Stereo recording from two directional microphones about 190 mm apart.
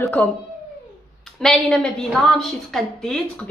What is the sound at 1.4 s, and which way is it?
A woman's voice, 5° left (ahead or behind).